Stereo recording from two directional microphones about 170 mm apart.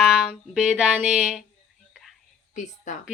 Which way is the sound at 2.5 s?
45° left (ahead or behind).